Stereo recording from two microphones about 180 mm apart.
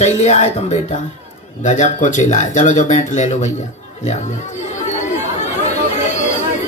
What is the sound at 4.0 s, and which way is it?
Chatter, 40° left (ahead or behind).